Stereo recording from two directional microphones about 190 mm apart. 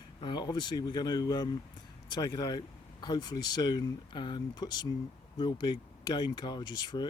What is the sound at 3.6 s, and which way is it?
Speech, 25° left (ahead or behind).